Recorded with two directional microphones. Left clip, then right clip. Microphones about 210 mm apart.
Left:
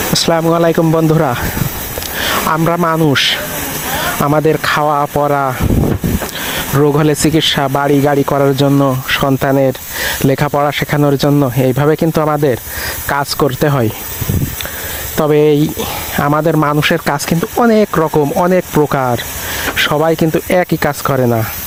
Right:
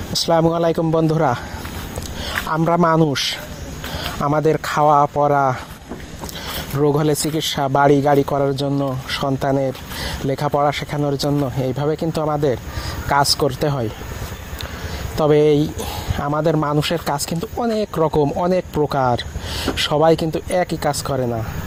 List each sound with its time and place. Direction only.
0.1 s speech: 50° left (ahead or behind)
6.7 s speech: 45° left (ahead or behind)
15.2 s speech: 45° left (ahead or behind)